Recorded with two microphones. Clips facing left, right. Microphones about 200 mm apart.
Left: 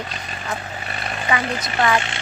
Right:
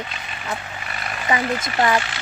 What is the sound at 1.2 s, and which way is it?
Speech, 25° right (ahead or behind).